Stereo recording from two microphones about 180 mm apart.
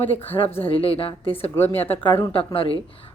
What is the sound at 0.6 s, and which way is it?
Speech, 30° left (ahead or behind).